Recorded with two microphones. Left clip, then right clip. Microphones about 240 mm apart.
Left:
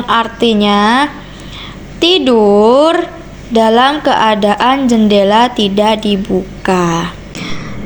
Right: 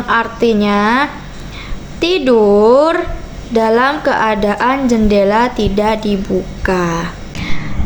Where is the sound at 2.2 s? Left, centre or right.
Centre.